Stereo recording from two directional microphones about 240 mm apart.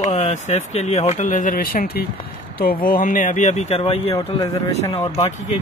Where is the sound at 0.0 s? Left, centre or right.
Left.